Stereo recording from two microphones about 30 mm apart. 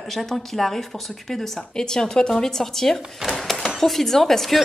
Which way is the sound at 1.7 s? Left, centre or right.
Left.